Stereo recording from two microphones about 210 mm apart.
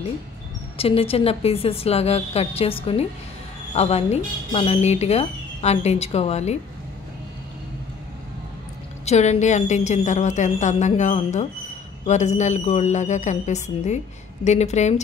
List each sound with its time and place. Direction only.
0.7 s a woman's voice: 25° left (ahead or behind)
9.0 s a woman's voice: 30° left (ahead or behind)